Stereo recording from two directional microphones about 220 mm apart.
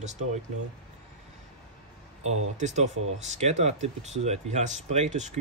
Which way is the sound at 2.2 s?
30° right (ahead or behind).